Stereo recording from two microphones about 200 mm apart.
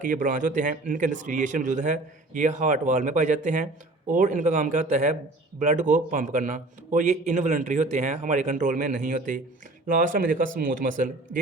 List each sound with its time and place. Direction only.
0.0 s speech: 40° right (ahead or behind)